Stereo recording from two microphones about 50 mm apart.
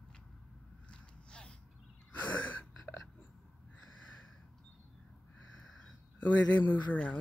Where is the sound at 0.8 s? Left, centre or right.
Centre.